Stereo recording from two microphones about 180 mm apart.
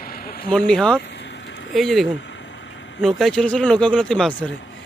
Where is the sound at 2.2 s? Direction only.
80° left.